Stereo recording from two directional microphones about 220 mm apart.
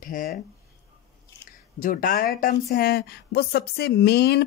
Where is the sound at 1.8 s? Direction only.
40° left (ahead or behind).